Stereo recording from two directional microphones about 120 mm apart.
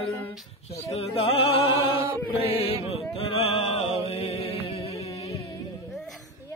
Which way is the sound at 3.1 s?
55° left (ahead or behind).